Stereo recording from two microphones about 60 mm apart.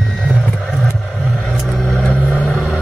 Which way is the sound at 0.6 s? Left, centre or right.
Centre.